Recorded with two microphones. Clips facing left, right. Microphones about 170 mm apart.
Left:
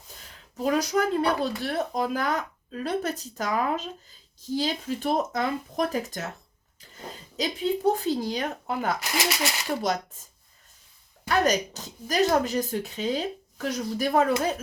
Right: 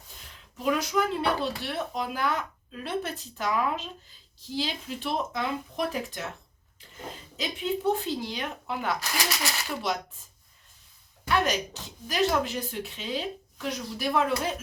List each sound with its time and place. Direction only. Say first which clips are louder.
0.5 s speech: left 2 dB; 40° left (ahead or behind)
7.3 s speech: left 4 dB; 40° left (ahead or behind)
9.0 s speech: left 4 dB; 20° left (ahead or behind)
9.7 s speech: left 5 dB; 45° left (ahead or behind)
11.3 s speech: left 3 dB; 40° left (ahead or behind)